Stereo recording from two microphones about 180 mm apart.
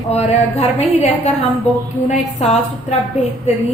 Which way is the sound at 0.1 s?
35° left (ahead or behind).